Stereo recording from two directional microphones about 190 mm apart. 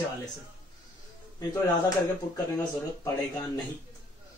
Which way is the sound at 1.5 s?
20° left (ahead or behind).